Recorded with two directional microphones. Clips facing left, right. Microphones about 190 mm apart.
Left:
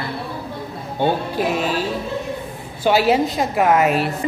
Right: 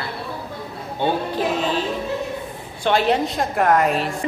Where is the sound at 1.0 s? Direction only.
10° left (ahead or behind).